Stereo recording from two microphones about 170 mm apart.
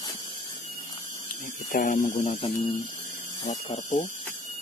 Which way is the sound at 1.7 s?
50° left (ahead or behind).